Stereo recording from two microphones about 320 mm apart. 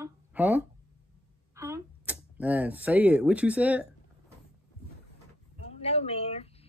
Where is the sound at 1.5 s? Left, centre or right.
Centre.